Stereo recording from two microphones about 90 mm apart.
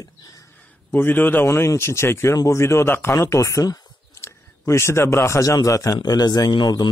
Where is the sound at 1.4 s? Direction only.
35° left (ahead or behind).